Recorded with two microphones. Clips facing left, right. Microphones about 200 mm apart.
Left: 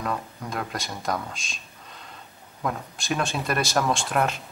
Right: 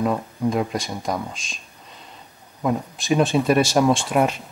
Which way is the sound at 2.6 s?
Centre (ahead or behind).